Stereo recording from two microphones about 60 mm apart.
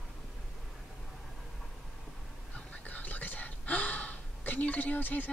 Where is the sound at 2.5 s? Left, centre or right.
Left.